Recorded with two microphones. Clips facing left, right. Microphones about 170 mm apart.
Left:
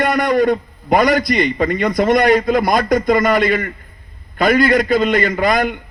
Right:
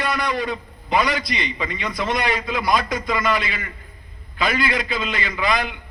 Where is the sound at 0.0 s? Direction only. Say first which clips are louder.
Left 9 dB; 50° left (ahead or behind).